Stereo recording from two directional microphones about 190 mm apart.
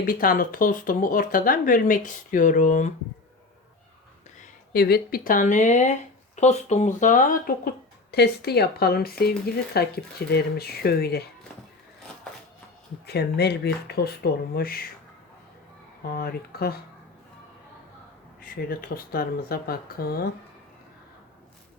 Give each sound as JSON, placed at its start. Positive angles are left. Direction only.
{"t": 0.0, "sound": "speech", "side_deg": 50}
{"t": 4.7, "sound": "speech", "side_deg": 55}
{"t": 8.1, "sound": "speech", "side_deg": 60}
{"t": 13.1, "sound": "speech", "side_deg": 60}
{"t": 16.1, "sound": "speech", "side_deg": 55}
{"t": 18.7, "sound": "speech", "side_deg": 50}